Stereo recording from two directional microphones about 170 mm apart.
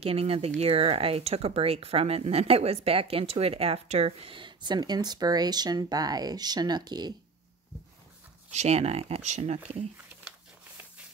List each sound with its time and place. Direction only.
0.0 s speech: 35° right (ahead or behind)
8.5 s speech: 40° right (ahead or behind)